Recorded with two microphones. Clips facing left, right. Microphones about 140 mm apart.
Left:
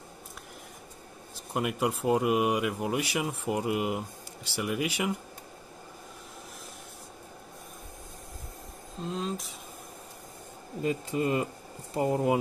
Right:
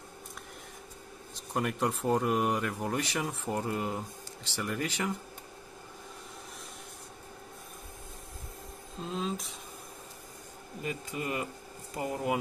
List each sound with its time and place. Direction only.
1.5 s speech: 10° left (ahead or behind)
8.9 s speech: centre (ahead or behind)
10.8 s speech: 30° left (ahead or behind)